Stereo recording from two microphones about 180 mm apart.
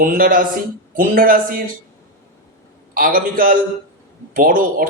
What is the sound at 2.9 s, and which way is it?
A man's voice, 50° right (ahead or behind).